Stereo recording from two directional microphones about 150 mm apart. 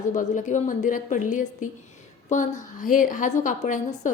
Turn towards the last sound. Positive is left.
turn(degrees=55)  # may be behind; listen again after turning